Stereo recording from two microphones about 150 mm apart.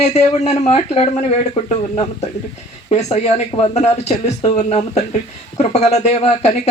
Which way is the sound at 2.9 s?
45° left (ahead or behind).